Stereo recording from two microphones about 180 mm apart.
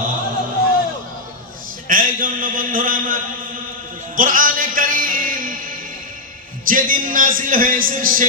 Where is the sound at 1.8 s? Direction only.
50° right (ahead or behind).